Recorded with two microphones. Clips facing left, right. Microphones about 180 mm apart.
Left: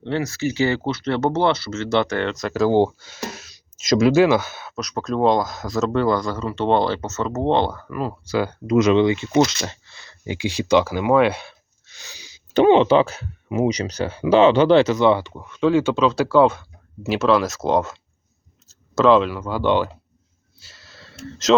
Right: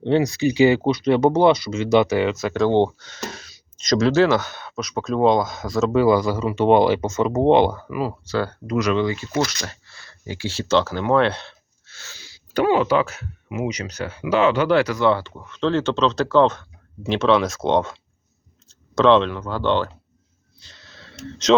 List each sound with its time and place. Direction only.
0.0 s speech: 15° right (ahead or behind)
8.2 s speech: 10° left (ahead or behind)
20.6 s a sound: 5° left (ahead or behind)